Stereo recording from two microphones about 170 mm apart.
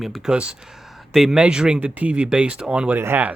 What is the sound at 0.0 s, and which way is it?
Speech, centre (ahead or behind).